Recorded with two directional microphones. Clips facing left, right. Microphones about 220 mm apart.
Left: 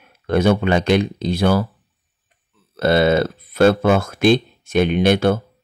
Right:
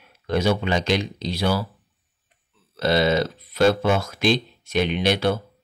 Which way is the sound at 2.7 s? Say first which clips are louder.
Left 4 dB; 55° left (ahead or behind).